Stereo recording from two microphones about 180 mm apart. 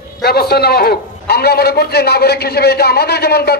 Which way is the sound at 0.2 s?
60° left (ahead or behind).